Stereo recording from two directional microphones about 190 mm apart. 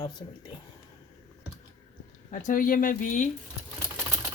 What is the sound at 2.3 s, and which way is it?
Speech, 45° left (ahead or behind).